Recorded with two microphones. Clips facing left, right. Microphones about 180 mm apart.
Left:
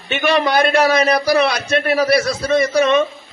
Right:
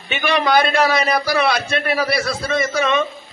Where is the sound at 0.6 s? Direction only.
45° left (ahead or behind).